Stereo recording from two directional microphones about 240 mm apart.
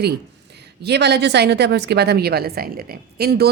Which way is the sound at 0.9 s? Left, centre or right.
Right.